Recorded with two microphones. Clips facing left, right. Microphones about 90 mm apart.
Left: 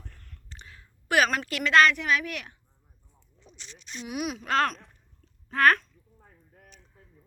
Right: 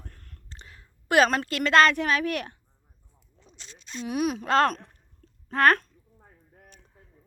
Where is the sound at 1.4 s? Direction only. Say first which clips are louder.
Right 1 dB; 40° right (ahead or behind).